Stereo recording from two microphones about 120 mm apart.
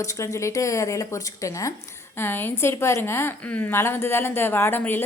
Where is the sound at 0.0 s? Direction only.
25° left (ahead or behind).